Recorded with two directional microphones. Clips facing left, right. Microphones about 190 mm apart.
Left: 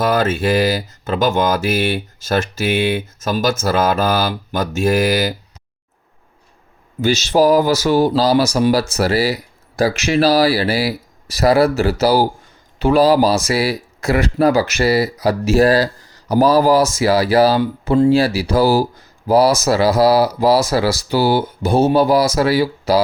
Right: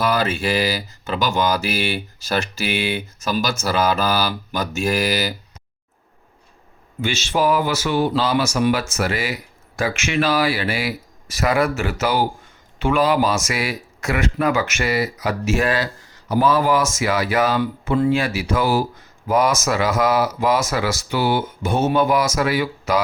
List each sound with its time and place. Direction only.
0.0 s speech: 45° left (ahead or behind)
2.9 s speech: 50° left (ahead or behind)
7.0 s speech: 40° left (ahead or behind)